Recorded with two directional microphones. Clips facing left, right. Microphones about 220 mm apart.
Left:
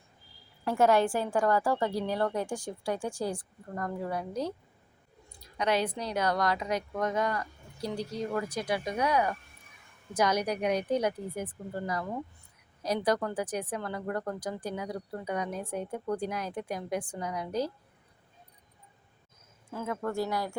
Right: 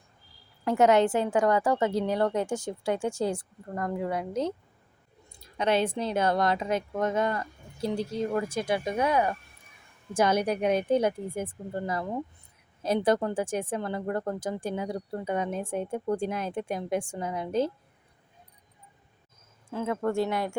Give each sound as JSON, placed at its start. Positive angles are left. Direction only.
{"t": 0.6, "sound": "a woman's voice", "side_deg": -20}
{"t": 19.7, "sound": "a woman's voice", "side_deg": -25}